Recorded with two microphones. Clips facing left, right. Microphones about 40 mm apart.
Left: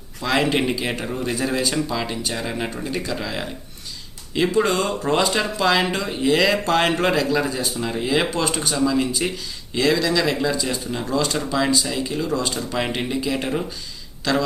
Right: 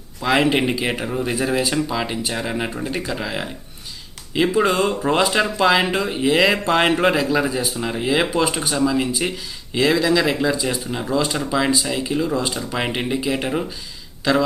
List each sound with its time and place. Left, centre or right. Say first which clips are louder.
0.2 s speech: right 3 dB; centre